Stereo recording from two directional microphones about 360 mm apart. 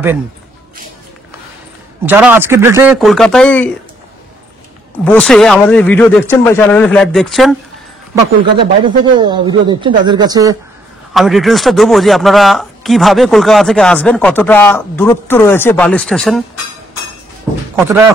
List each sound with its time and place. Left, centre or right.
2.0 s speech: centre
5.0 s speech: centre
8.1 s speech: centre
17.7 s speech: centre